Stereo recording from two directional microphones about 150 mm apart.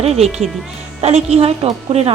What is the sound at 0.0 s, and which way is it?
A woman's voice, 45° right (ahead or behind).